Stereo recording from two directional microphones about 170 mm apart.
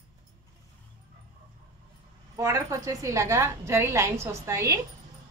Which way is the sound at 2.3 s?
20° right (ahead or behind).